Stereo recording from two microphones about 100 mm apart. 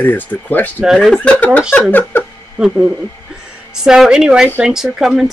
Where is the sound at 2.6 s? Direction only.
5° right (ahead or behind).